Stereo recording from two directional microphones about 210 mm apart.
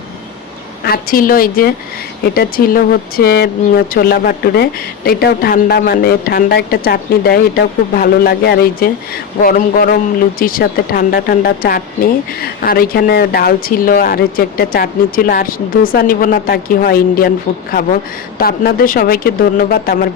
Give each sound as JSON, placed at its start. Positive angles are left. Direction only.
{"t": 0.9, "sound": "speech", "side_deg": 45}